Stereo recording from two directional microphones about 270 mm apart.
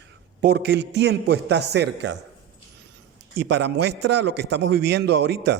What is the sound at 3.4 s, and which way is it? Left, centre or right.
A man's voice, right.